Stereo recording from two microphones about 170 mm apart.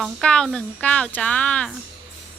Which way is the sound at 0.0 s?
5° left (ahead or behind).